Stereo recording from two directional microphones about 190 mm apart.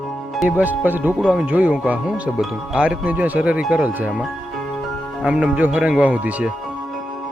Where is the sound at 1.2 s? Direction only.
Centre (ahead or behind).